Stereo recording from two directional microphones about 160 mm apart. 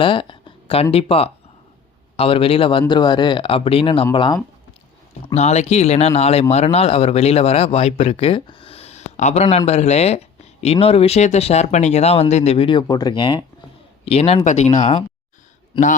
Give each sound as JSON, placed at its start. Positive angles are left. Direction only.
{"t": 0.0, "sound": "speech", "side_deg": 30}
{"t": 5.3, "sound": "a man's voice", "side_deg": 45}
{"t": 15.7, "sound": "speech", "side_deg": 30}